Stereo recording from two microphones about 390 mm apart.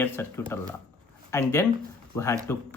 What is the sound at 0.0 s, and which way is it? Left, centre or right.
Speech, centre.